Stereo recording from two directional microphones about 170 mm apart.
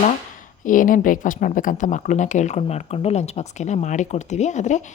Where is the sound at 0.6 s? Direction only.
50° left (ahead or behind).